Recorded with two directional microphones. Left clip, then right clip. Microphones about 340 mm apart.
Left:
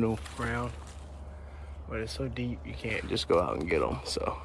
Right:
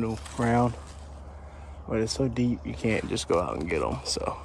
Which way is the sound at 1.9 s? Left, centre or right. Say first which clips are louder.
Right 8 dB; centre.